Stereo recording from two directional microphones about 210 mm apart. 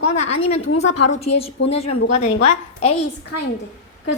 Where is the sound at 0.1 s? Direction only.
30° left (ahead or behind).